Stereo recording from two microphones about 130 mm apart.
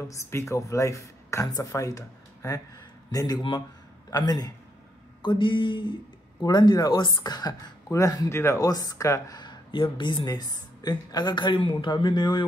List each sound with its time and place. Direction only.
0.1 s speech: 20° left (ahead or behind)